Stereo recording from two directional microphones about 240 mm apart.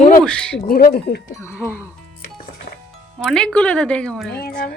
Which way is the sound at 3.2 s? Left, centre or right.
Centre.